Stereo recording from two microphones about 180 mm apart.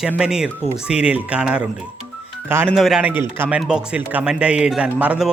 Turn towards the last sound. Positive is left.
turn(degrees=-10)  # may be behind; listen again after turning